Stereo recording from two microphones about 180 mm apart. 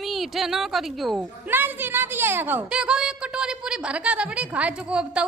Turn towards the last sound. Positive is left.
turn(degrees=-5)  # may be behind; listen again after turning